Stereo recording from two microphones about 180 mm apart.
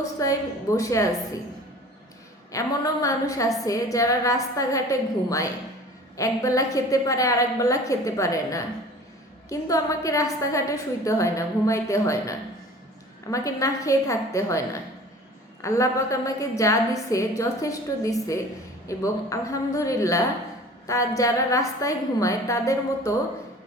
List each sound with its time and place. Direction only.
0.2 s a woman's voice: 20° left (ahead or behind)
2.5 s a woman's voice: 20° left (ahead or behind)